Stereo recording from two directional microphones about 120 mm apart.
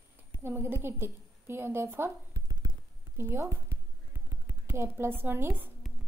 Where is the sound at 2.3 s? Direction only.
35° right (ahead or behind).